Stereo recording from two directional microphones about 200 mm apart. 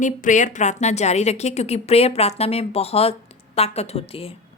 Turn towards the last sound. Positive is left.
turn(degrees=30)  # may be behind; listen again after turning